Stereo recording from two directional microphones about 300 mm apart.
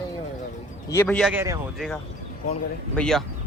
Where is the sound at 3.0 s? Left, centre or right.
Centre.